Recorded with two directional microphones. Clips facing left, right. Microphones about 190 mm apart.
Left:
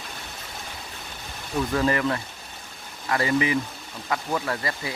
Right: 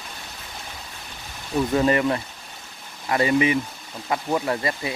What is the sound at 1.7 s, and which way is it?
Speech, 20° right (ahead or behind).